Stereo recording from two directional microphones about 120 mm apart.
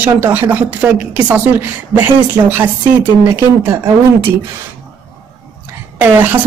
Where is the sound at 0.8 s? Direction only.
5° right (ahead or behind); by 3.9 s 20° right (ahead or behind).